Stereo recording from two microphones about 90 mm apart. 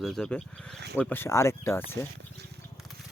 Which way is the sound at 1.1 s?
30° left (ahead or behind).